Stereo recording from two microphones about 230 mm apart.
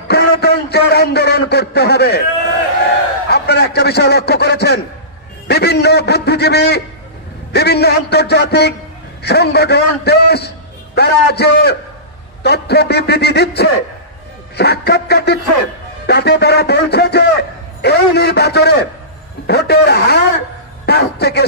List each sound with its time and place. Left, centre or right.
0.1 s a man's voice: left
3.3 s a man's voice: left